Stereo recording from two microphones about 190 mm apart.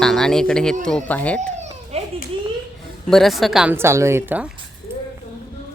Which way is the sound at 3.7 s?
15° right (ahead or behind).